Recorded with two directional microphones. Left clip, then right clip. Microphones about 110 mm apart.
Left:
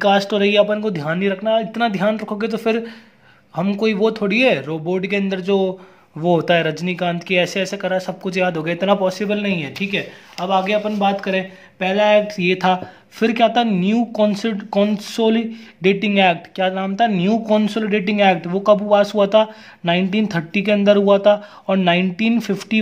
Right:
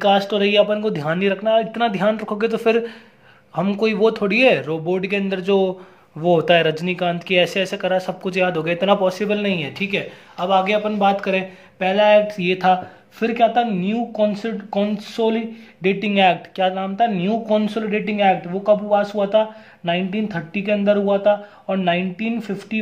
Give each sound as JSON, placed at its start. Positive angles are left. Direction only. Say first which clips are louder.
{"t": 0.0, "sound": "speech", "louder": "left 1 dB", "side_deg": 25}